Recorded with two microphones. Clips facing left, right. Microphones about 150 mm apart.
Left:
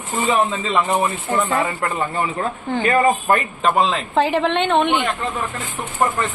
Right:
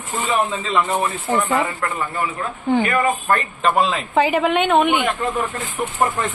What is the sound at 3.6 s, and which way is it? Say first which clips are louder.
Speech: even; 5° right (ahead or behind).